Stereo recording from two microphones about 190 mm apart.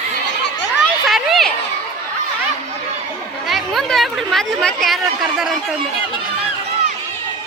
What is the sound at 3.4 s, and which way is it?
Speech, centre (ahead or behind).